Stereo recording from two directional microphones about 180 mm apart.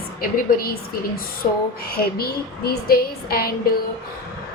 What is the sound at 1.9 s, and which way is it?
A woman's voice, 60° left (ahead or behind).